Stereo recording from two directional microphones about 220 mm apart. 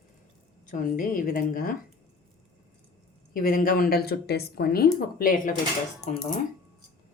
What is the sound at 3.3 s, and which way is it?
Speech, 40° left (ahead or behind).